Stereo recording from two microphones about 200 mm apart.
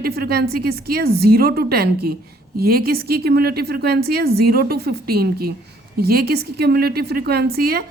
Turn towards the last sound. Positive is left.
turn(degrees=-50)  # may be behind; listen again after turning